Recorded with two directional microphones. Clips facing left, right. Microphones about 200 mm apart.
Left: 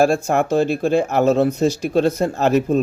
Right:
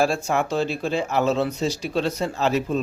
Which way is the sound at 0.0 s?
50° left (ahead or behind).